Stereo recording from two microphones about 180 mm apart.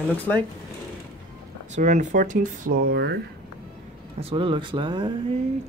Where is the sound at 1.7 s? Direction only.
40° right (ahead or behind); by 3.2 s 65° right (ahead or behind).